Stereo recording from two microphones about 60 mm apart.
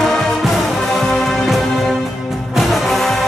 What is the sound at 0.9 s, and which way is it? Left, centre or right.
Music, centre.